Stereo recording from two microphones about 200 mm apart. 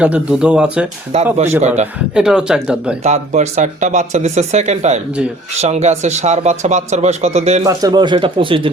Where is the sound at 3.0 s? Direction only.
35° right (ahead or behind).